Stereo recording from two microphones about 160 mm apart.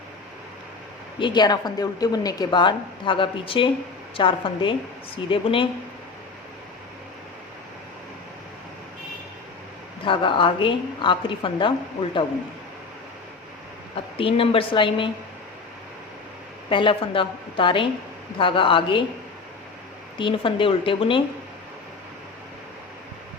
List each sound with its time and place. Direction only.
1.2 s a woman's voice: 25° left (ahead or behind)
10.0 s a woman's voice: 30° left (ahead or behind)
13.9 s a woman's voice: 35° left (ahead or behind)
16.6 s a woman's voice: 35° left (ahead or behind)
20.1 s a woman's voice: 30° left (ahead or behind)